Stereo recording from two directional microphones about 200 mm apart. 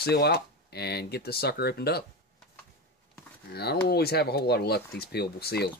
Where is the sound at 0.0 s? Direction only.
55° left (ahead or behind).